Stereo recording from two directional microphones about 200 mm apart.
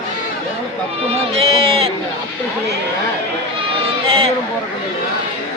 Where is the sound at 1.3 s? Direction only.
30° right (ahead or behind).